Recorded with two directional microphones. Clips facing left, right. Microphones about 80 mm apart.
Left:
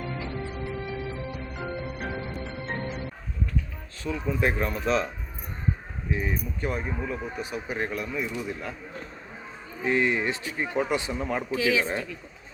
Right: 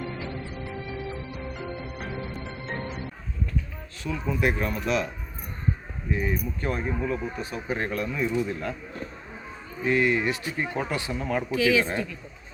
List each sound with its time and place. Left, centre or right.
4.0 s speech: left
6.1 s speech: centre
9.8 s speech: left